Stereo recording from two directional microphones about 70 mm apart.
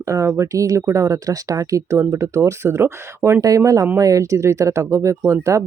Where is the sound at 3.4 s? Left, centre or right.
Right.